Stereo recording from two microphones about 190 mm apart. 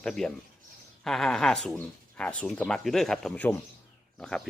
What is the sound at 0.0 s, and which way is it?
Speech, 5° left (ahead or behind).